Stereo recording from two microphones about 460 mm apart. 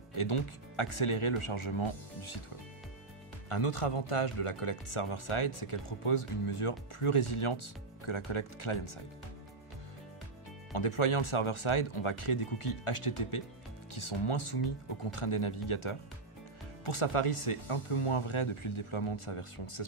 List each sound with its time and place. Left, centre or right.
0.1 s speech: left
3.4 s speech: left
10.7 s speech: left